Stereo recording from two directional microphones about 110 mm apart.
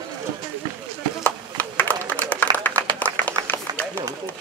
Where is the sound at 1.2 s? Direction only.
15° left (ahead or behind).